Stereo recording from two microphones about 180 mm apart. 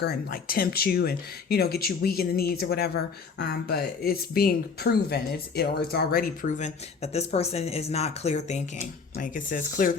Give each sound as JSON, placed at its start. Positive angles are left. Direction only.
{"t": 0.0, "sound": "speech", "side_deg": 60}